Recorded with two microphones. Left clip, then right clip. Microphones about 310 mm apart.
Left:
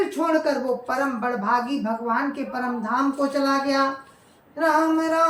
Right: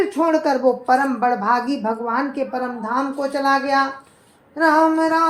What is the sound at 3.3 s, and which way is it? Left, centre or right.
Female singing, centre.